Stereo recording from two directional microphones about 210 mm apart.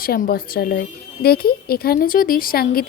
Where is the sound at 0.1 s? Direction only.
45° left (ahead or behind).